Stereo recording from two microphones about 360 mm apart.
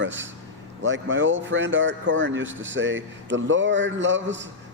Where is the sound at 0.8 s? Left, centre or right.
Right.